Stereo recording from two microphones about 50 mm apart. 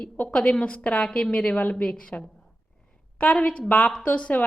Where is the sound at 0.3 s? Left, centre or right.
Centre.